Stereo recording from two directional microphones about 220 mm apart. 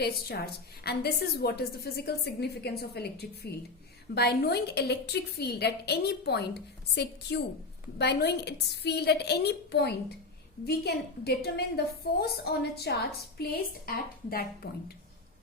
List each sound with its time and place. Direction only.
0.0 s a woman's voice: 45° left (ahead or behind)